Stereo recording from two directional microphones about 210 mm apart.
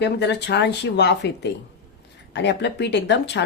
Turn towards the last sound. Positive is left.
turn(degrees=55)  # may be behind; listen again after turning